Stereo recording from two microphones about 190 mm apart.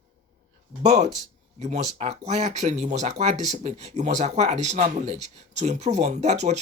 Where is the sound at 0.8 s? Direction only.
35° right (ahead or behind).